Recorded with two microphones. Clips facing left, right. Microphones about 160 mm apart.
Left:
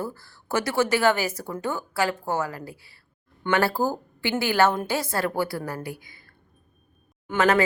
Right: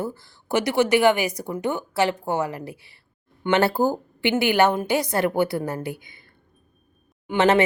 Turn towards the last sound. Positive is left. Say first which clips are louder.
# right 3 dB
turn(degrees=-25)  # may be behind; listen again after turning